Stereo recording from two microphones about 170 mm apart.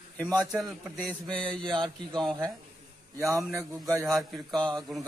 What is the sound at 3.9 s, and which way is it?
Speech, 20° right (ahead or behind).